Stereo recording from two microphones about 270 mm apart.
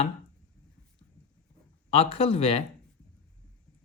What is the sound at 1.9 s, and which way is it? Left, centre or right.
Speech, left.